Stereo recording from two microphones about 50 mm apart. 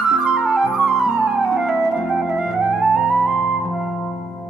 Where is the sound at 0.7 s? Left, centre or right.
Centre.